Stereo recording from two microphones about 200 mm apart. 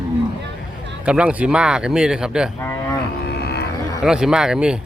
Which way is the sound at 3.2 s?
55° left (ahead or behind).